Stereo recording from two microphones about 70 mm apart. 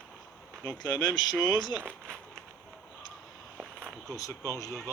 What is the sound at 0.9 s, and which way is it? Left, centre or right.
Speech, left.